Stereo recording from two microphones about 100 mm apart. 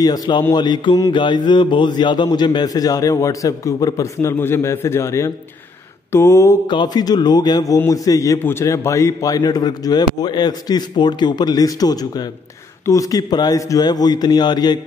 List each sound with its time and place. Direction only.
0.0 s a man's voice: 40° left (ahead or behind)
6.1 s mantra: 30° left (ahead or behind)
6.7 s a man's voice: 45° left (ahead or behind)